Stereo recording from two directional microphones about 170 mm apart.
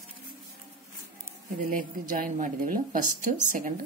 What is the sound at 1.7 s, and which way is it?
Speech, 50° right (ahead or behind).